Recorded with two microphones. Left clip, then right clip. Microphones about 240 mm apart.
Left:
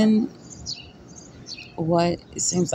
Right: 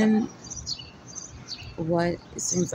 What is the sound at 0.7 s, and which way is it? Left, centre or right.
Bird, centre.